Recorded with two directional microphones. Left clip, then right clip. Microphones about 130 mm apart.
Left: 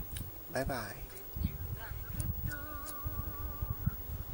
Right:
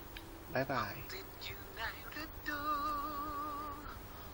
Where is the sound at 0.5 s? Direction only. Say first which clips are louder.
Right 1 dB; 15° left (ahead or behind).